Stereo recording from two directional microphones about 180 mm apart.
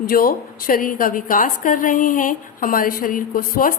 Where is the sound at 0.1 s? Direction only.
55° left (ahead or behind).